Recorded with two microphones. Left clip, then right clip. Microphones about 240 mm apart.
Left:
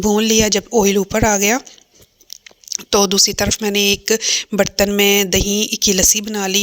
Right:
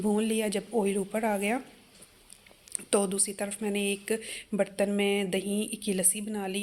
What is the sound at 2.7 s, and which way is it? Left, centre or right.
Speech, left.